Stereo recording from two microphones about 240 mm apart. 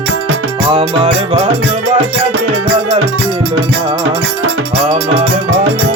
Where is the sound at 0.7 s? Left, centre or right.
Right.